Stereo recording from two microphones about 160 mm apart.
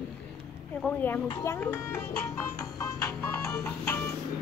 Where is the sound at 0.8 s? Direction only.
10° left (ahead or behind).